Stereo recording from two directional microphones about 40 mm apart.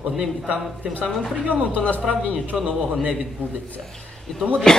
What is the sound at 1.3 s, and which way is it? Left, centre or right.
Speech, right.